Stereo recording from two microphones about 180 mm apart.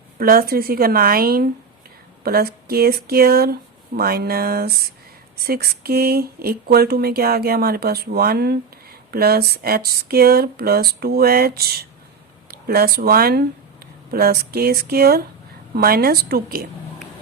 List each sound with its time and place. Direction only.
0.2 s speech: 55° right (ahead or behind)